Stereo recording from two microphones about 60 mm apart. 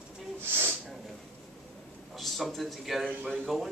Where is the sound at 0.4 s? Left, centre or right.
Right.